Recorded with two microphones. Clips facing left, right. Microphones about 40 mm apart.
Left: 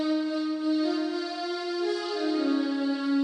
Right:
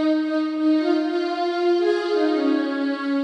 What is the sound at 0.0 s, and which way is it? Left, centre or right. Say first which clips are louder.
Music: right 7 dB; right.